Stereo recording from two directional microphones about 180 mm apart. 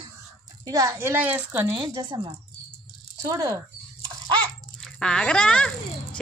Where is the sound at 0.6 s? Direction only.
20° right (ahead or behind).